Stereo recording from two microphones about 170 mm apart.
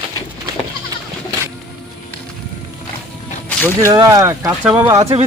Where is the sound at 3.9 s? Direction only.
20° right (ahead or behind).